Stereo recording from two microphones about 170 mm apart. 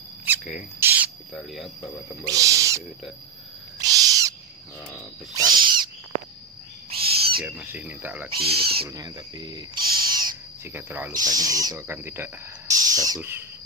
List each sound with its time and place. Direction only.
0.3 s a sound: 10° right (ahead or behind)
1.3 s speech: centre (ahead or behind)
2.2 s speech: 20° right (ahead or behind)
3.8 s owl: 20° right (ahead or behind)
6.9 s owl: 35° right (ahead or behind)
7.4 s speech: 10° right (ahead or behind)
8.4 s speech: 35° right (ahead or behind)
8.8 s owl: 20° right (ahead or behind)
10.7 s speech: 15° right (ahead or behind)